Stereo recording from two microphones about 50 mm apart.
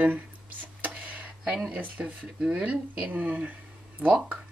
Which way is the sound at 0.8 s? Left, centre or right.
Right.